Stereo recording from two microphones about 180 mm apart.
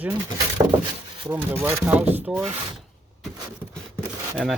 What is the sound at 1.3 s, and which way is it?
Speech, 10° right (ahead or behind).